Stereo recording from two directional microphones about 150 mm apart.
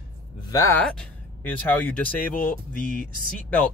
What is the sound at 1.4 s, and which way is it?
Speech, 10° left (ahead or behind).